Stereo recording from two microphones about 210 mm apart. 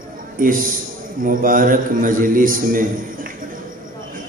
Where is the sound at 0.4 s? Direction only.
40° right (ahead or behind).